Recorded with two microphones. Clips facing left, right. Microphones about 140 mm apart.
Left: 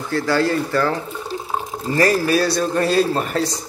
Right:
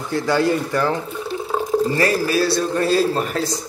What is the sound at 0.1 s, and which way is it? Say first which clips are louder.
Speech: even; 20° right (ahead or behind).